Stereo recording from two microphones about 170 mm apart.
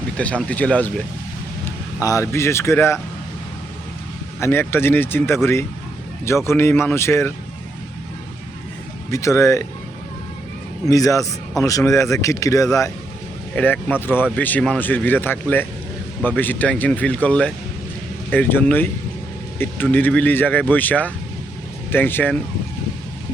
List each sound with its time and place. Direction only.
0.2 s speech: 5° left (ahead or behind)
2.0 s speech: 15° left (ahead or behind)
4.4 s speech: 15° left (ahead or behind)
9.0 s speech: 15° left (ahead or behind)
10.8 s speech: 20° left (ahead or behind)